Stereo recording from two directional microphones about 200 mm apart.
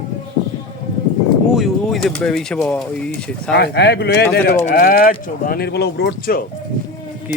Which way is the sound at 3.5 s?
55° left (ahead or behind).